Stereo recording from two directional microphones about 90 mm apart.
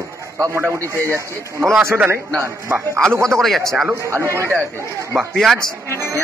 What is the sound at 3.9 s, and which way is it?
Speech, 30° right (ahead or behind).